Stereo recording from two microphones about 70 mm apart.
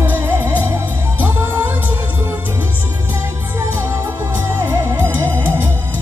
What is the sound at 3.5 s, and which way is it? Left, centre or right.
Music, right.